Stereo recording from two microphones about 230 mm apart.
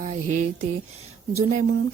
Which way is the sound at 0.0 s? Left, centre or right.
Right.